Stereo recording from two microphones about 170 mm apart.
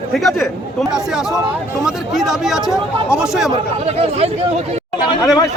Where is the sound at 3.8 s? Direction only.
35° right (ahead or behind).